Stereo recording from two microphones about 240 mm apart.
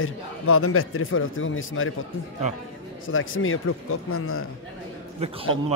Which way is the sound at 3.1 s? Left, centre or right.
Left.